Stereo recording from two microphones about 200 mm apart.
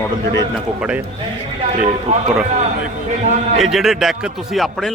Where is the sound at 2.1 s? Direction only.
35° right (ahead or behind).